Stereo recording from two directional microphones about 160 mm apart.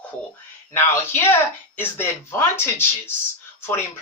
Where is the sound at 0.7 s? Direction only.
15° left (ahead or behind).